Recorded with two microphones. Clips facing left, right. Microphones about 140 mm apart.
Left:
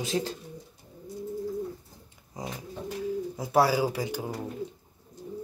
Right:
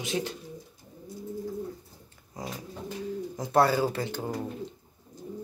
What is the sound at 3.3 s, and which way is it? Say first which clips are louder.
Speech: right 1 dB; 10° left (ahead or behind).